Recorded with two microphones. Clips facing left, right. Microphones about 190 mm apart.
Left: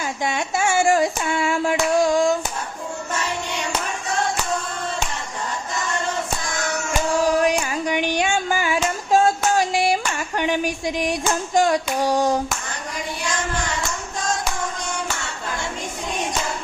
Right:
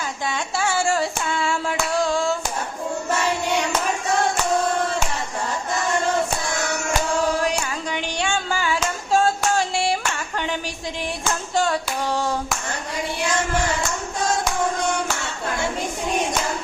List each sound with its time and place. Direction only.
0.3 s hands: 20° left (ahead or behind)
7.4 s a sound: 15° left (ahead or behind)
11.5 s child singing: 15° left (ahead or behind)